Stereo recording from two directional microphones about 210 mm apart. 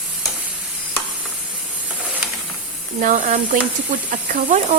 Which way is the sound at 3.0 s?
40° right (ahead or behind).